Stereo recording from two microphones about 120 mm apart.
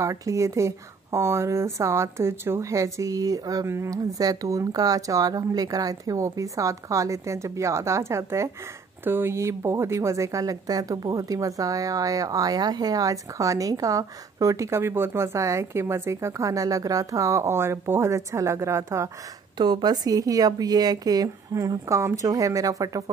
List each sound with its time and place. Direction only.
0.0 s a woman's voice: 25° right (ahead or behind)
19.6 s speech: 35° right (ahead or behind)